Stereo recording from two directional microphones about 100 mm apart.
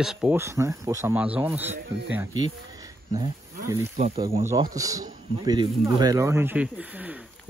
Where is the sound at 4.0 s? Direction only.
85° right.